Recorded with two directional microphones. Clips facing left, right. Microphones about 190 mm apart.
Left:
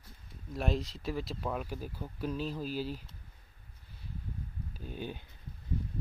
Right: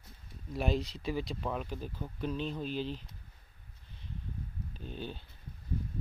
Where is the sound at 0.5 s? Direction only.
Centre (ahead or behind).